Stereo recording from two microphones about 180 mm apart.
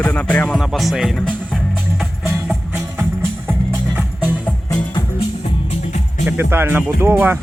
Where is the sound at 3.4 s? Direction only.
10° right (ahead or behind).